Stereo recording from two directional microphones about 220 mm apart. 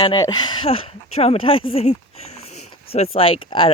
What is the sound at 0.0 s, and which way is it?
Speech, 20° left (ahead or behind).